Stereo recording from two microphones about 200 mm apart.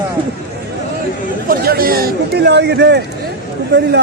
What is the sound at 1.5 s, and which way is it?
A man's voice, 50° right (ahead or behind).